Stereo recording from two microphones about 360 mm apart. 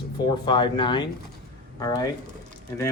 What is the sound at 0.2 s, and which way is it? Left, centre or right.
Speech, centre.